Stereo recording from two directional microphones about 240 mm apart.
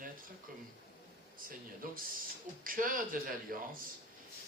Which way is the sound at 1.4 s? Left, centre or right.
Right.